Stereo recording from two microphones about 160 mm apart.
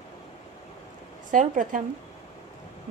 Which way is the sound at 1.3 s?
55° right (ahead or behind).